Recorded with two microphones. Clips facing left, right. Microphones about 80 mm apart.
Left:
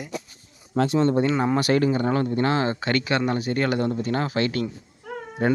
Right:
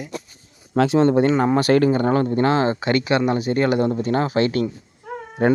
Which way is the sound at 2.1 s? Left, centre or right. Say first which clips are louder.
Right 4 dB; right.